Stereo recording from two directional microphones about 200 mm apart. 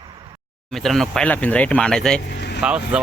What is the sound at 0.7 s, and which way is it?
Speech, centre (ahead or behind).